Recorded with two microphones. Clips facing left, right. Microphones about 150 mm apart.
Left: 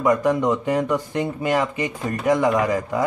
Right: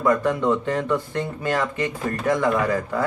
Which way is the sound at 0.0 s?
15° left (ahead or behind).